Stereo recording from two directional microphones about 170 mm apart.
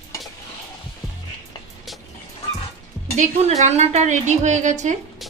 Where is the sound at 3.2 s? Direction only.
40° right (ahead or behind).